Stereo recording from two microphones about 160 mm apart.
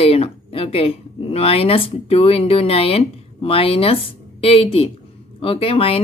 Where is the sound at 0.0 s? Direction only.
40° left (ahead or behind).